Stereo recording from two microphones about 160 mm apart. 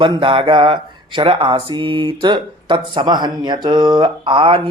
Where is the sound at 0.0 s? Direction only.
30° right (ahead or behind).